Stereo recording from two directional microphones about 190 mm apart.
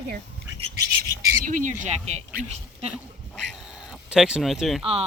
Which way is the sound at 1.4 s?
40° right (ahead or behind).